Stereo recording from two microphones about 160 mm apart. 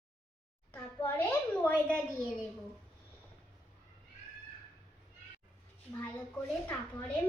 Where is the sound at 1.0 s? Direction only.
10° left (ahead or behind).